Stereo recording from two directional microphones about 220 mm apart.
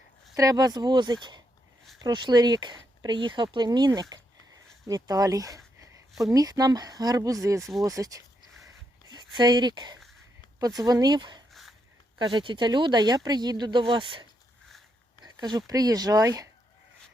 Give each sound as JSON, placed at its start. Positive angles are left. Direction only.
{"t": 0.3, "sound": "speech", "side_deg": -15}
{"t": 7.6, "sound": "speech", "side_deg": 0}
{"t": 7.9, "sound": "speech", "side_deg": -15}
{"t": 8.6, "sound": "a sound", "side_deg": -20}
{"t": 10.6, "sound": "speech", "side_deg": -15}